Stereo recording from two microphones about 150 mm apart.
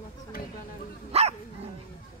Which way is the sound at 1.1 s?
45° right (ahead or behind).